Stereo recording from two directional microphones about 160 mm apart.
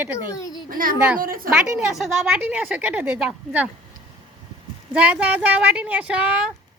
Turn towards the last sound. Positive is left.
turn(degrees=-5)  # may be behind; listen again after turning